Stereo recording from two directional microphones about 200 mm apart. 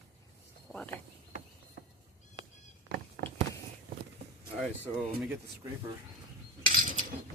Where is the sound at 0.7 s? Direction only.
5° left (ahead or behind).